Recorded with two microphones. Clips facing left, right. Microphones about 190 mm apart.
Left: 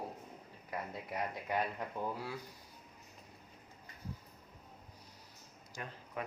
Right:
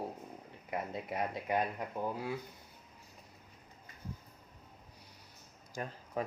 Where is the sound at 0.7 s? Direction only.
25° right (ahead or behind).